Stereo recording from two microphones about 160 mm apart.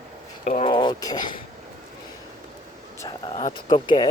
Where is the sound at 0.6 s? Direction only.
30° left (ahead or behind).